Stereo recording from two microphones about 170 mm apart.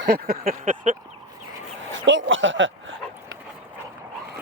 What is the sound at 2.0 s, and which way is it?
Speech, 90° right.